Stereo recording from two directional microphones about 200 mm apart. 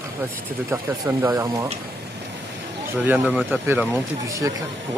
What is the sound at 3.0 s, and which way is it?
Speech, 5° right (ahead or behind).